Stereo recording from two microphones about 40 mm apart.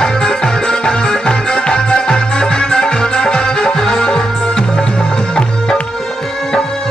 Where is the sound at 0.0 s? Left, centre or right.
Centre.